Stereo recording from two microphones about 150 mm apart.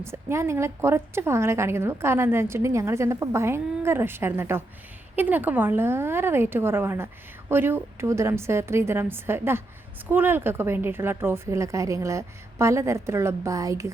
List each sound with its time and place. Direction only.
0.0 s a woman's voice: 15° right (ahead or behind)